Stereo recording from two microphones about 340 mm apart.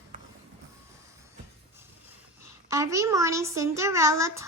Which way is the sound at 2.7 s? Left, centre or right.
Centre.